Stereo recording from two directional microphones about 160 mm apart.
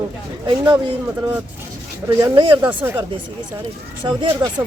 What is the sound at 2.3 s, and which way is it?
Speech, 30° right (ahead or behind).